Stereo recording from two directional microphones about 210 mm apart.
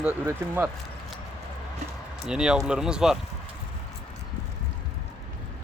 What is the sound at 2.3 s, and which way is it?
Speech, 5° right (ahead or behind).